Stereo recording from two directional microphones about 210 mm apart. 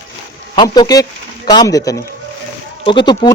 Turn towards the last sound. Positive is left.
turn(degrees=20)  # may be behind; listen again after turning